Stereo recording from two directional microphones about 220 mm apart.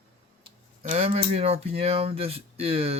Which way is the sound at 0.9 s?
30° right (ahead or behind).